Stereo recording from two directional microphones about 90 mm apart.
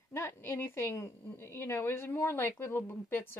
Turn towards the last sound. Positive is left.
turn(degrees=25)  # may be behind; listen again after turning